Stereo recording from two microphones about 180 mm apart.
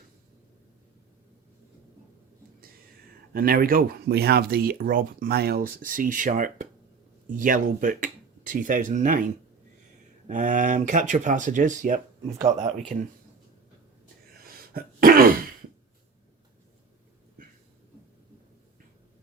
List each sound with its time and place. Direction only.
3.3 s speech: 55° right (ahead or behind)
14.4 s throat clearing: 55° right (ahead or behind)